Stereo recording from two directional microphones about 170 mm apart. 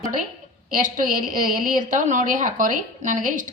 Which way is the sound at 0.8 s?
55° right (ahead or behind).